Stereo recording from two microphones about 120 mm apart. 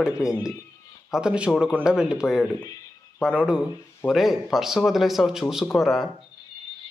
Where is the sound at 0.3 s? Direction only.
25° left (ahead or behind).